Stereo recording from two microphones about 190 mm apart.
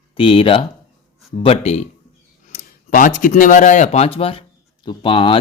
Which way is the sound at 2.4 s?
40° left (ahead or behind).